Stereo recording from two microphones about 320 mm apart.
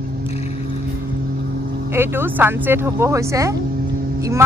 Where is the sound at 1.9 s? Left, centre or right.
Centre.